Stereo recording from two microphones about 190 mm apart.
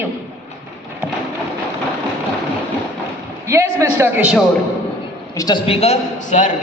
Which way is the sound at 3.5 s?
15° right (ahead or behind).